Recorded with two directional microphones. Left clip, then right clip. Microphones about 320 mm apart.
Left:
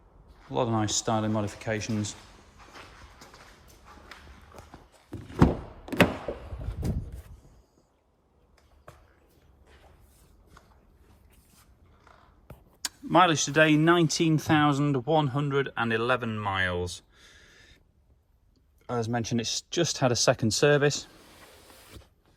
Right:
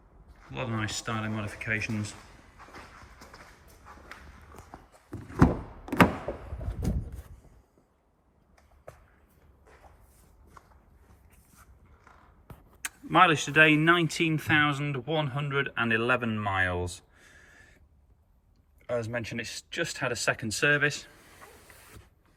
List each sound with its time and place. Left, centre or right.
0.5 s speech: centre
3.2 s a sound: centre
4.1 s walk: centre
5.1 s a sound: centre
13.1 s speech: centre
18.9 s speech: centre
19.2 s speech: left
19.9 s speech: centre